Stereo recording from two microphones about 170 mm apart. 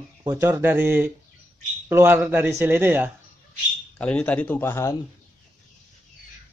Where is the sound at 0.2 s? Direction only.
20° right (ahead or behind).